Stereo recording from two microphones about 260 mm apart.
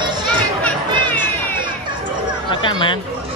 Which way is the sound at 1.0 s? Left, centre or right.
Centre.